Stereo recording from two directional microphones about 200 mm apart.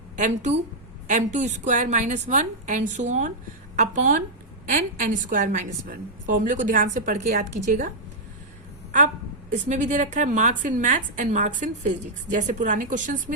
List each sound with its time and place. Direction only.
0.2 s a woman's voice: 35° right (ahead or behind)
9.5 s a woman's voice: 35° right (ahead or behind)